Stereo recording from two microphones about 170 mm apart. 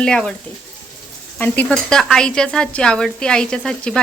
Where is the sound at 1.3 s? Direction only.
10° left (ahead or behind).